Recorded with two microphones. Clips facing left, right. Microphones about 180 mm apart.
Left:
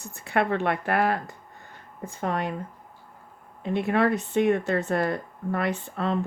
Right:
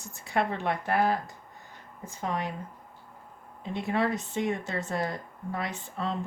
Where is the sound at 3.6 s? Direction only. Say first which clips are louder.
Left 5 dB; 60° left (ahead or behind).